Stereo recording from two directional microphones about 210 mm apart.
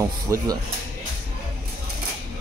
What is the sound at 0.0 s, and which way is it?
Speech, 15° right (ahead or behind).